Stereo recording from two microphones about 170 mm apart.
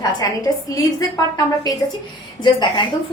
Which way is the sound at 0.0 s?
20° left (ahead or behind).